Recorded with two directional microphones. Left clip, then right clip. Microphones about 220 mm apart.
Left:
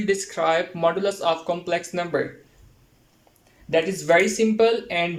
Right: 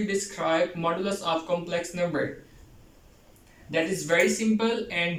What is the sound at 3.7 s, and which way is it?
Speech, 50° left (ahead or behind).